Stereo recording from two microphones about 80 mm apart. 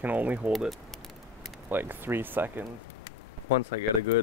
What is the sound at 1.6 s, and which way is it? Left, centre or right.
Speech, right.